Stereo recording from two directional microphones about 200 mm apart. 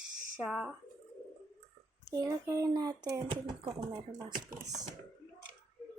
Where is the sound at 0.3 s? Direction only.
5° right (ahead or behind).